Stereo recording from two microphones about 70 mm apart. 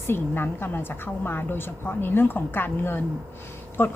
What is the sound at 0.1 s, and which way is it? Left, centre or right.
A woman's voice, left.